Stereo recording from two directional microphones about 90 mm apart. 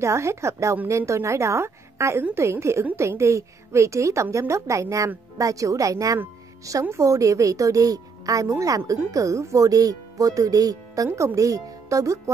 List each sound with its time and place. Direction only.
0.0 s speech: 35° right (ahead or behind)